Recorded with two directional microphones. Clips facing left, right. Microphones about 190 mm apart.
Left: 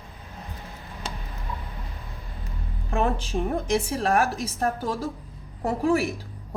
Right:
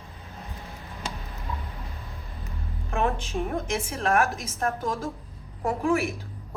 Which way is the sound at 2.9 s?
35° left (ahead or behind).